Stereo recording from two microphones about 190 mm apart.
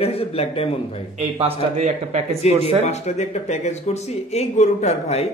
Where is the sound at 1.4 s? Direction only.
35° right (ahead or behind).